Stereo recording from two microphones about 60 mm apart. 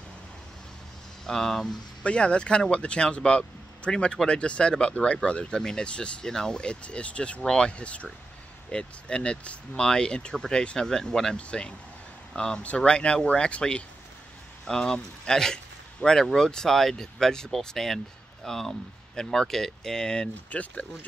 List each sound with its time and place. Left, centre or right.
1.2 s speech: centre
2.0 s speech: centre
20.4 s speech: left